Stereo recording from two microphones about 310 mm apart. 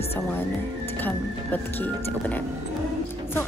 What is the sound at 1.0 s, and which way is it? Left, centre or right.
A woman's voice, centre.